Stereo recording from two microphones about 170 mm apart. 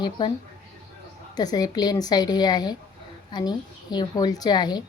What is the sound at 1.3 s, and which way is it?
A woman's voice, 25° left (ahead or behind).